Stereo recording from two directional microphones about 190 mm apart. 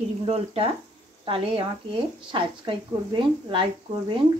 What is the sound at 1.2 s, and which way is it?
A woman's voice, 30° right (ahead or behind).